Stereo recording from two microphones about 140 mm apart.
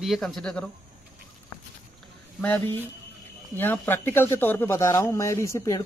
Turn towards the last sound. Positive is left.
turn(degrees=20)  # may be behind; listen again after turning